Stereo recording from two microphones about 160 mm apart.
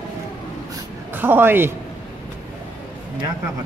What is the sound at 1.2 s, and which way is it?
Speech, 10° right (ahead or behind).